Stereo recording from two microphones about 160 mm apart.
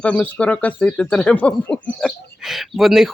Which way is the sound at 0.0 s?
10° left (ahead or behind).